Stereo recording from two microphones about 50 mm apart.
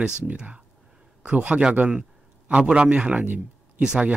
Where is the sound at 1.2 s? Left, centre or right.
Right.